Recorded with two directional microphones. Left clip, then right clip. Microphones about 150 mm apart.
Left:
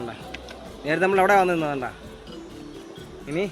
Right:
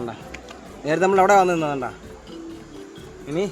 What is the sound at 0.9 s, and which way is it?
A man's voice, 40° right (ahead or behind).